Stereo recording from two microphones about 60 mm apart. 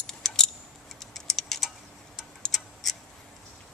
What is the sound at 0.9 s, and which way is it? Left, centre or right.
Typing, centre.